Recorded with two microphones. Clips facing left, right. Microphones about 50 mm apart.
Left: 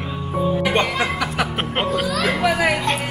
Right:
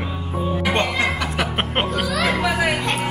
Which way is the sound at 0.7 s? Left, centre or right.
Centre.